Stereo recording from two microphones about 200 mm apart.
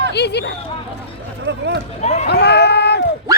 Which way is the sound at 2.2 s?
55° left (ahead or behind).